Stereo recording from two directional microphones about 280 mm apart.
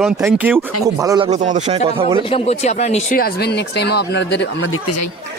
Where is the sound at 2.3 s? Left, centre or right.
Left.